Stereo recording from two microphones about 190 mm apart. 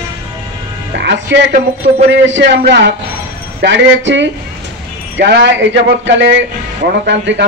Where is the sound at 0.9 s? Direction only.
65° right (ahead or behind).